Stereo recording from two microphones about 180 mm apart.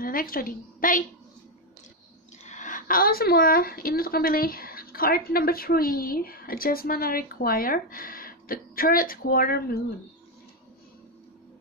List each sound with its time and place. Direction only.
0.0 s a woman's voice: 50° left (ahead or behind)
2.4 s a woman's voice: 45° left (ahead or behind)